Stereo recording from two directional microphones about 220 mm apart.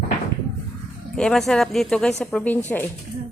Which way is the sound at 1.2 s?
Centre (ahead or behind).